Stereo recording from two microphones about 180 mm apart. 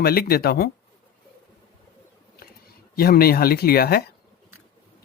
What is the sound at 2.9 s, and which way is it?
Speech, 55° left (ahead or behind).